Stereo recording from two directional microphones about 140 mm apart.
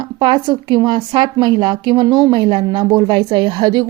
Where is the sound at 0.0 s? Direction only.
35° right (ahead or behind).